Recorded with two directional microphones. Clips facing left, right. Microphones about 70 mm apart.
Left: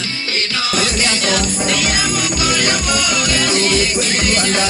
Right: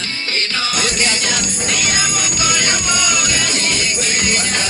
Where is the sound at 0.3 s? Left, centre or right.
Right.